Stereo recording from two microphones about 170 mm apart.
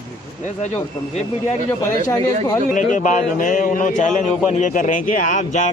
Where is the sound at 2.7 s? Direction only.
50° left (ahead or behind).